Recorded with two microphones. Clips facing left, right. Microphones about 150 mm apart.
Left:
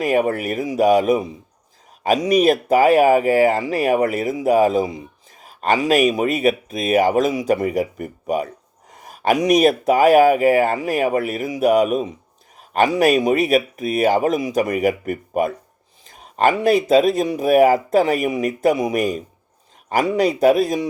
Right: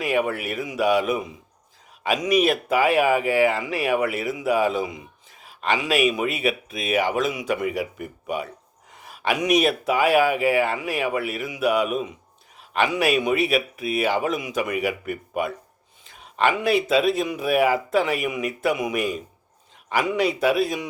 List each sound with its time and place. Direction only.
0.0 s speech: 40° left (ahead or behind)